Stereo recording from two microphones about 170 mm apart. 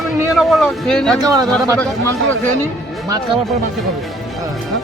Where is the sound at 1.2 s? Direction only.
20° right (ahead or behind).